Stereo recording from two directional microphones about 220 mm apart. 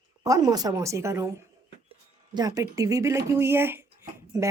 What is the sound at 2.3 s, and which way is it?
A woman's voice, 15° right (ahead or behind).